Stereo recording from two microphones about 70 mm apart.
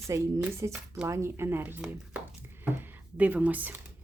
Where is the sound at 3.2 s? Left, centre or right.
Right.